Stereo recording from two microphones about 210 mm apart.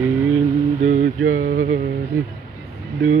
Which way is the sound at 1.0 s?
65° right (ahead or behind).